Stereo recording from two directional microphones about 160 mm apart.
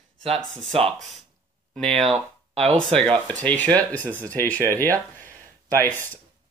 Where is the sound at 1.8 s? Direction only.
Centre (ahead or behind).